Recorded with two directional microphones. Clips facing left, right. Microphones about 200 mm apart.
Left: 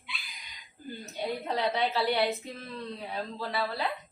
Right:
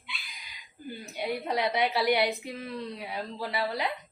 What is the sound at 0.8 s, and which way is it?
A woman's voice, 10° right (ahead or behind).